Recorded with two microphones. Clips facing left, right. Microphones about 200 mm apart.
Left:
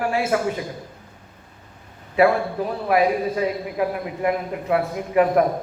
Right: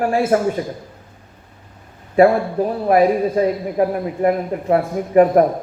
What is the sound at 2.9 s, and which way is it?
A man's voice, 35° right (ahead or behind).